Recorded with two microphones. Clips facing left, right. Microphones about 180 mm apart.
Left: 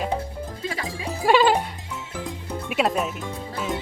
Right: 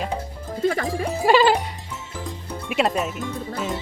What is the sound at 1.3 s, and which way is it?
Music, centre (ahead or behind).